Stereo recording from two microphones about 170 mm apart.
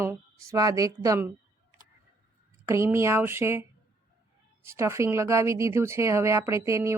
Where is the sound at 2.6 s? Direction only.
15° right (ahead or behind).